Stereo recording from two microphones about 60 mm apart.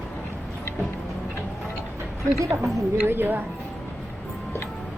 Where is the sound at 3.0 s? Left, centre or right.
Right.